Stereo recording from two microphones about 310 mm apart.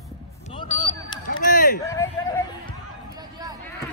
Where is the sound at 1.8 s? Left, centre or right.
Centre.